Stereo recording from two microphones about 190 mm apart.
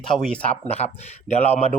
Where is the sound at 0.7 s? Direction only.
35° left (ahead or behind).